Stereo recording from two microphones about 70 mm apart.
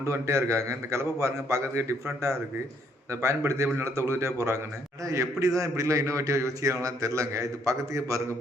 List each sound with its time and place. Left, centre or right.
0.0 s a man's voice: right
3.1 s a man's voice: right